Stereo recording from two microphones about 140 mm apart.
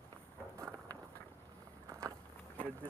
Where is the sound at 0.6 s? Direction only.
20° right (ahead or behind).